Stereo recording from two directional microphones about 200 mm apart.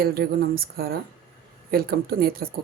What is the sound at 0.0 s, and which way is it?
Speech, 50° right (ahead or behind).